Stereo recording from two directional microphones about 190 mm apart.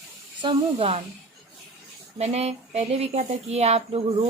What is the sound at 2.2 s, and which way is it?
A man's voice, 35° right (ahead or behind).